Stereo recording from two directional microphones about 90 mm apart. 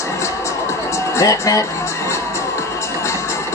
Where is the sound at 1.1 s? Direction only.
40° left (ahead or behind).